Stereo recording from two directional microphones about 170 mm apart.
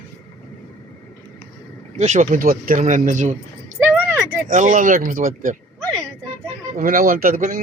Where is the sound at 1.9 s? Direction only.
45° right (ahead or behind).